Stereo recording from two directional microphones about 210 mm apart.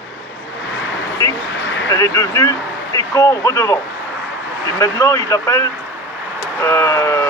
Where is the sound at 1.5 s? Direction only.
60° left (ahead or behind).